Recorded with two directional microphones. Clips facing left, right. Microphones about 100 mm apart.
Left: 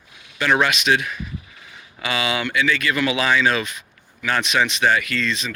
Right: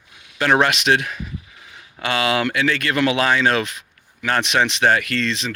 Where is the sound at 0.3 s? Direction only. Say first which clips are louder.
Right 2 dB; 50° right (ahead or behind).